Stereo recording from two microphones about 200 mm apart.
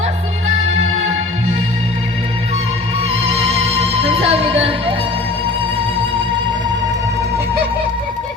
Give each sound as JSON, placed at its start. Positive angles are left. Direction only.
{"t": 3.2, "sound": "music", "side_deg": -30}